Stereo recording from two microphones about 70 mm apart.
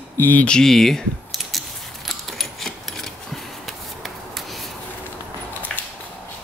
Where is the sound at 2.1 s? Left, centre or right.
Centre.